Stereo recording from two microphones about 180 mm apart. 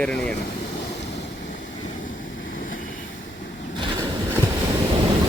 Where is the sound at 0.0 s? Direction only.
5° left (ahead or behind).